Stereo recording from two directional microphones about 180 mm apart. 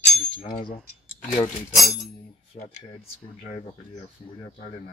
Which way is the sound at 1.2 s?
45° left (ahead or behind).